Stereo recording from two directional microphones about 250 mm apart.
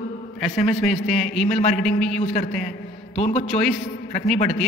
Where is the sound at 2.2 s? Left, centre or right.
Left.